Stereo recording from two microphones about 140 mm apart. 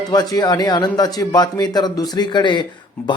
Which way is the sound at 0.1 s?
25° left (ahead or behind).